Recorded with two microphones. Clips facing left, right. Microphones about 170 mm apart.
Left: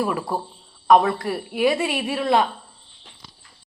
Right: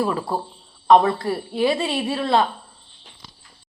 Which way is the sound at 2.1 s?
15° left (ahead or behind).